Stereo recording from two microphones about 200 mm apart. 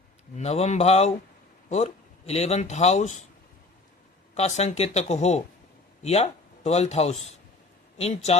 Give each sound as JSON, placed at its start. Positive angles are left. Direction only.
{"t": 0.3, "sound": "speech", "side_deg": 30}
{"t": 4.4, "sound": "a man's voice", "side_deg": 35}